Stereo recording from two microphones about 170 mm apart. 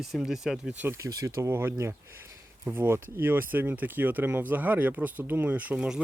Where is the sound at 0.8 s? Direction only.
15° right (ahead or behind).